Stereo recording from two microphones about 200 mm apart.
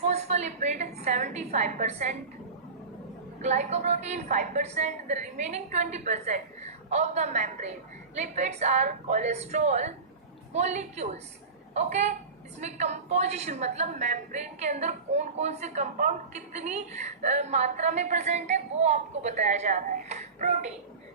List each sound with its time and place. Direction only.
0.0 s a woman's voice: 35° right (ahead or behind)
3.4 s a woman's voice: 35° right (ahead or behind)